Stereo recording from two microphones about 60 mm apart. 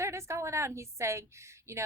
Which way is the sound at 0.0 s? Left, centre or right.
Right.